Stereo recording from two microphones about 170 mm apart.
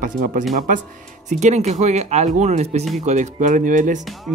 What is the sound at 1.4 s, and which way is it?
Speech, 40° right (ahead or behind).